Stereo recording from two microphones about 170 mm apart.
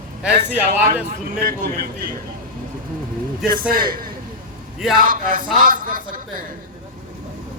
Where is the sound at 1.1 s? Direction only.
55° right (ahead or behind).